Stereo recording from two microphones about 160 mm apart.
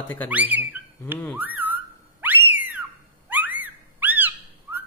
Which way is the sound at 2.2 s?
10° right (ahead or behind).